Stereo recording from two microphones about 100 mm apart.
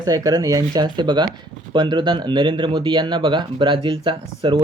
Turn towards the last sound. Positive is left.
turn(degrees=-55)  # may be behind; listen again after turning